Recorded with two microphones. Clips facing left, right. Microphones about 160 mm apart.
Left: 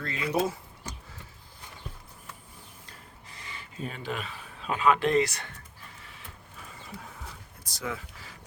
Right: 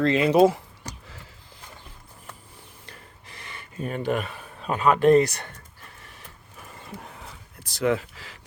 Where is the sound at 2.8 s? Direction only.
70° right (ahead or behind); by 5.2 s 45° right (ahead or behind).